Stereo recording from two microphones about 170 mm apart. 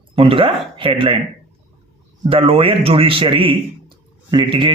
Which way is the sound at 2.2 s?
35° right (ahead or behind).